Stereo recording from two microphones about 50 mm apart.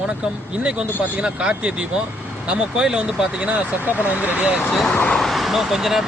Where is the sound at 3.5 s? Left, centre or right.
Right.